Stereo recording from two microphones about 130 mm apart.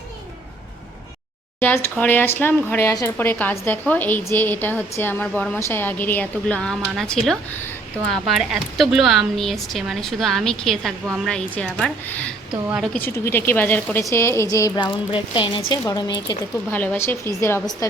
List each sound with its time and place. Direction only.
1.5 s speech: 20° left (ahead or behind)
13.1 s speech: 20° left (ahead or behind)
14.8 s speech: 40° left (ahead or behind)
16.7 s speech: 10° left (ahead or behind)